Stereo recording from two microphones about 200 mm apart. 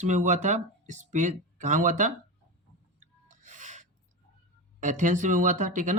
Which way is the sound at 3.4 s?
40° right (ahead or behind).